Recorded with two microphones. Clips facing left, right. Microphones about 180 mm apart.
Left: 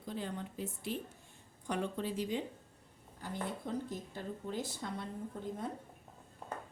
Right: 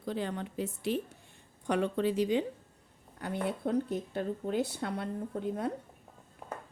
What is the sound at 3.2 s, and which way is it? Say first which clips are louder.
A woman's voice: right 7 dB; 70° right (ahead or behind).